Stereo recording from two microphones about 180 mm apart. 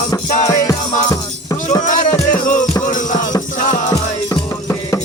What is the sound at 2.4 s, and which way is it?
Music, 45° left (ahead or behind).